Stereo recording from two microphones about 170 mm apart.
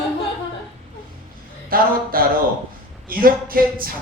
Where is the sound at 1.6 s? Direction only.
60° right (ahead or behind).